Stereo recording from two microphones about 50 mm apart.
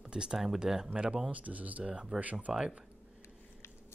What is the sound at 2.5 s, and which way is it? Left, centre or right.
Speech, centre.